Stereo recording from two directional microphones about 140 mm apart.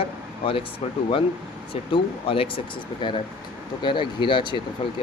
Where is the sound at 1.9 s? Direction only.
40° left (ahead or behind).